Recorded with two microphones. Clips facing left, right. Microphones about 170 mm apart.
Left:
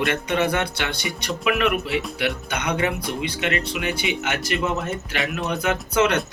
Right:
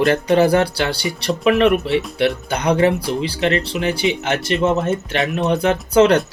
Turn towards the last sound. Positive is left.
turn(degrees=-30)  # may be behind; listen again after turning